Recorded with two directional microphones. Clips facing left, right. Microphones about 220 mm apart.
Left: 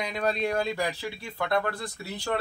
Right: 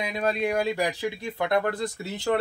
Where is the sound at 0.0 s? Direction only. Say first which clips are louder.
Right 2 dB; 10° right (ahead or behind).